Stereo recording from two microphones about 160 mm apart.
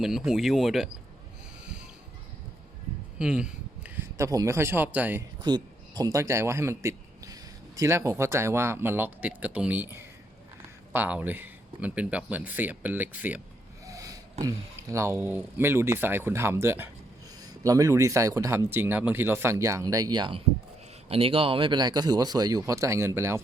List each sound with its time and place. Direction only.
0.0 s speech: 5° right (ahead or behind)
3.2 s a man's voice: 5° right (ahead or behind)
5.4 s a man's voice: 30° right (ahead or behind); by 13.4 s 10° right (ahead or behind)
13.8 s a sound: 20° right (ahead or behind)
14.4 s speech: 20° right (ahead or behind)